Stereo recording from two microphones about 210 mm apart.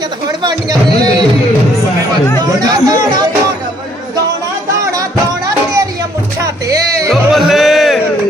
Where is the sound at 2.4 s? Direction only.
20° right (ahead or behind).